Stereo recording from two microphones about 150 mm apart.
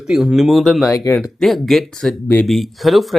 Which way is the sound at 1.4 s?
Centre (ahead or behind).